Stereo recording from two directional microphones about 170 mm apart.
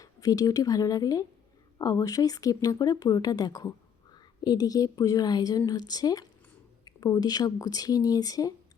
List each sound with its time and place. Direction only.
0.0 s a woman's voice: 20° left (ahead or behind)